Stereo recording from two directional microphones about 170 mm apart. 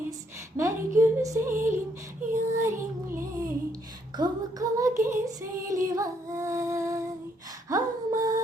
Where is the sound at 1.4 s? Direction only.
50° right (ahead or behind).